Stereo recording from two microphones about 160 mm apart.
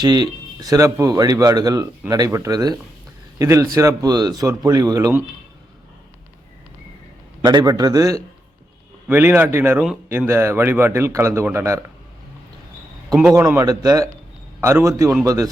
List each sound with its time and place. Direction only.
0.0 s speech: 25° right (ahead or behind)
7.4 s speech: 25° right (ahead or behind)
13.3 s speech: 20° right (ahead or behind)